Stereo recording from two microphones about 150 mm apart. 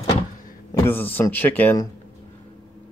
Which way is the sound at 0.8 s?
15° left (ahead or behind).